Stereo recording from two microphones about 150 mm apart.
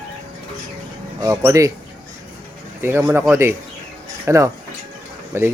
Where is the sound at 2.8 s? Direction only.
15° right (ahead or behind).